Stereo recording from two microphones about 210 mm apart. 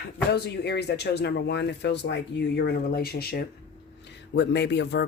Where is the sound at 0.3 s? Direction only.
50° left (ahead or behind).